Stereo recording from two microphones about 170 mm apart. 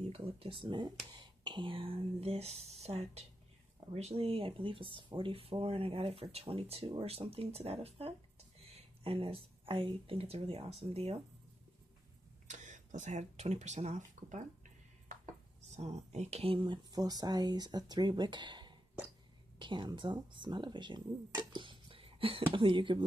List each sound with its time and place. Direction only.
0.1 s speech: 35° right (ahead or behind)
12.4 s speech: 45° right (ahead or behind)
15.7 s speech: 40° right (ahead or behind)